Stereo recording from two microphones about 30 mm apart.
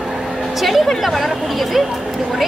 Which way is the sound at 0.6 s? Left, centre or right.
Centre.